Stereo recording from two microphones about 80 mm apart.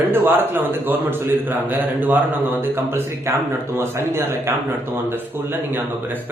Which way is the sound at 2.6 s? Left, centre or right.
Right.